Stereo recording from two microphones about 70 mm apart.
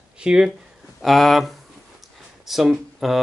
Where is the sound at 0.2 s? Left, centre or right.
Centre.